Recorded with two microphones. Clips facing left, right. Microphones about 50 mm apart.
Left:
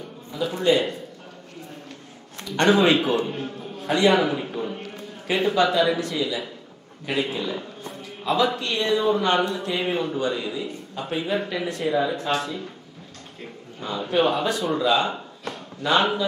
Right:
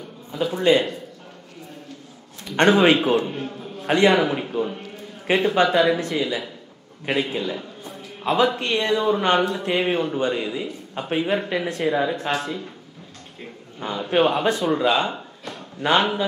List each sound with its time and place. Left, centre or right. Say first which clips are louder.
0.3 s a man's voice: right 2 dB; right
2.4 s a man's voice: right 2 dB; right
4.2 s a man's voice: right 2 dB; right
5.2 s speech: right 2 dB; right
13.7 s speech: right 2 dB; right